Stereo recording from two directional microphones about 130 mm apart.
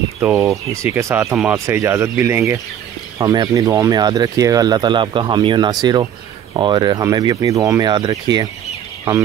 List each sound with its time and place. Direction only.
0.2 s speech: 20° right (ahead or behind)